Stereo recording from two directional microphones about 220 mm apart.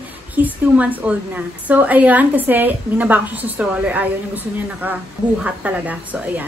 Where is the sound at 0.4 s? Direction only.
5° right (ahead or behind).